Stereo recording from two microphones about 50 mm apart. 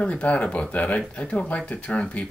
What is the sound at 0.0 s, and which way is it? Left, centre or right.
Speech, left.